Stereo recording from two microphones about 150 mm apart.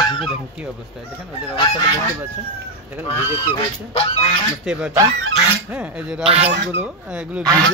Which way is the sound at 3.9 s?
40° left (ahead or behind).